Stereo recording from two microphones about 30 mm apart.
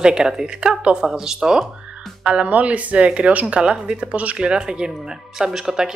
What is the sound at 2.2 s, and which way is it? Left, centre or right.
Speech, right.